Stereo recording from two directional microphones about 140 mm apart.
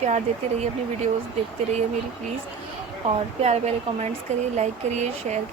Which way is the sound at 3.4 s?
50° right (ahead or behind).